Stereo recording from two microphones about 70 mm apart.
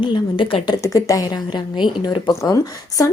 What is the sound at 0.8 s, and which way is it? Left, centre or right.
Speech, left.